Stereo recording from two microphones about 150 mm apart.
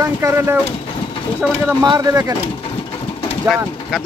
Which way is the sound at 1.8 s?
25° right (ahead or behind).